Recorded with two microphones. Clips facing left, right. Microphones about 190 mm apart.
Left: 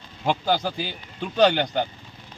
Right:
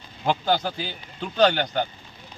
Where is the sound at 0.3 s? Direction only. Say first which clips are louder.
Even; 10° left (ahead or behind).